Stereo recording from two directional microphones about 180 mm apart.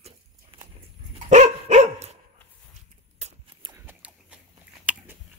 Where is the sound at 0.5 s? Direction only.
30° right (ahead or behind).